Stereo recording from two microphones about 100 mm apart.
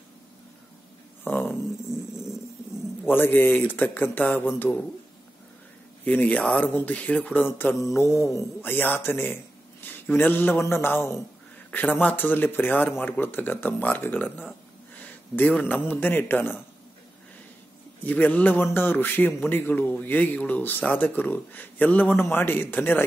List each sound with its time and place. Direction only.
1.2 s a sound: 20° left (ahead or behind)
3.1 s a man's voice: 20° left (ahead or behind)
6.0 s a man's voice: 15° left (ahead or behind)
18.0 s a man's voice: 15° left (ahead or behind)